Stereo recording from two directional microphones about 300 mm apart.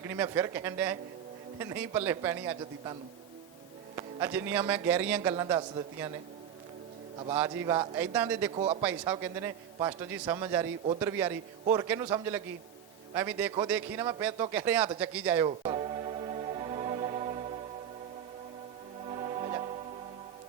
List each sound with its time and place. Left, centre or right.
0.1 s a man's voice: centre
3.9 s a man's voice: centre
7.2 s a man's voice: centre
8.5 s speech: centre
8.8 s a man's voice: centre
15.4 s music: centre
19.0 s music: centre